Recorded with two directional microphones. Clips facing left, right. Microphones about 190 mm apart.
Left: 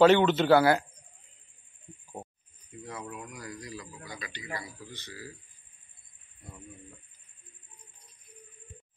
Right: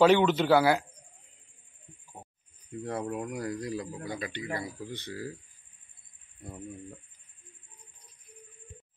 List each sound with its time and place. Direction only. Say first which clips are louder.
0.0 s speech: left 1 dB; 10° right (ahead or behind)
2.8 s speech: right 8 dB; 60° right (ahead or behind)